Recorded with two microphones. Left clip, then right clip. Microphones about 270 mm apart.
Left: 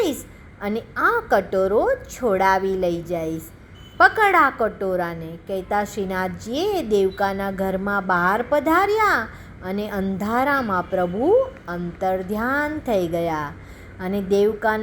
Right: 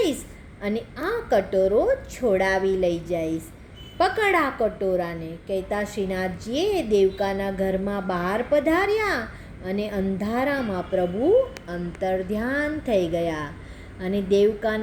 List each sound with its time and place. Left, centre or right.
0.6 s a woman's voice: centre